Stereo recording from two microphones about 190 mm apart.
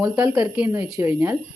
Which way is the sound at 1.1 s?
5° right (ahead or behind).